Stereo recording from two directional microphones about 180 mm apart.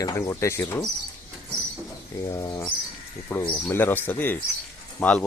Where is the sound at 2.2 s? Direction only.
20° left (ahead or behind).